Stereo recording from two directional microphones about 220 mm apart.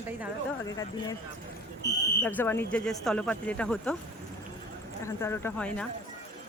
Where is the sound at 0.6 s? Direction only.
15° left (ahead or behind).